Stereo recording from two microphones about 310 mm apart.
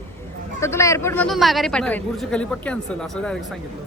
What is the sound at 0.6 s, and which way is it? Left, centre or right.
A man's voice, centre.